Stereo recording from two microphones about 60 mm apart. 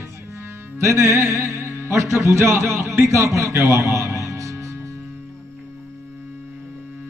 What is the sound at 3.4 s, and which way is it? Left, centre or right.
Music, right.